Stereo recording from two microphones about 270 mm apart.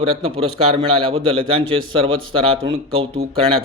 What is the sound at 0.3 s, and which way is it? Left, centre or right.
A man's voice, right.